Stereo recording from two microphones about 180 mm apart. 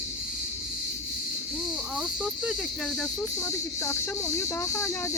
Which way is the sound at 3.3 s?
15° left (ahead or behind).